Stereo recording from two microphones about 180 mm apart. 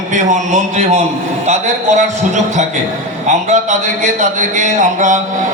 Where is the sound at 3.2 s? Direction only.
40° right (ahead or behind).